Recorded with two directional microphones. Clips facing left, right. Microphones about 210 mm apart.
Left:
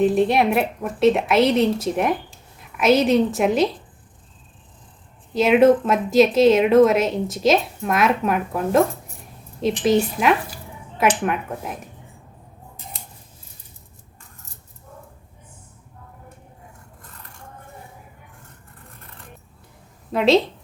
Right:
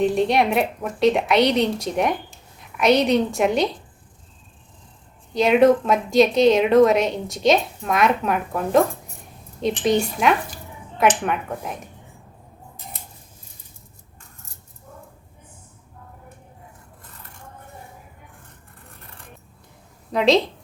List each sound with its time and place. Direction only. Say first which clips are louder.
0.0 s a woman's voice: left 2 dB; centre (ahead or behind)
5.3 s a woman's voice: left 1 dB; 5° left (ahead or behind)
20.1 s a woman's voice: left 1 dB; centre (ahead or behind)